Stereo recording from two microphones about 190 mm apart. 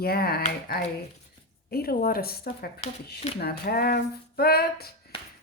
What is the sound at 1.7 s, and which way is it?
Speech, 50° left (ahead or behind).